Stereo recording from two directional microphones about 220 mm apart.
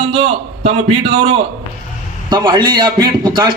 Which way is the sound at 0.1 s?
25° right (ahead or behind).